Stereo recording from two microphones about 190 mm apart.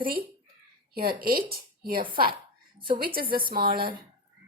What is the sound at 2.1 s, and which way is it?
Speech, 25° right (ahead or behind).